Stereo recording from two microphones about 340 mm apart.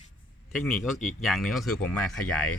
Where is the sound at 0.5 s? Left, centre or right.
Centre.